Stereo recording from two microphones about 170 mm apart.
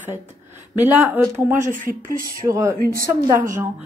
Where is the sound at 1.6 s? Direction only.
50° right (ahead or behind).